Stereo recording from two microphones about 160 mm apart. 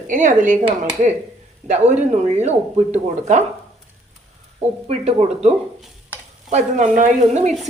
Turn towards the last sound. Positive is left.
turn(degrees=-50)  # may be behind; listen again after turning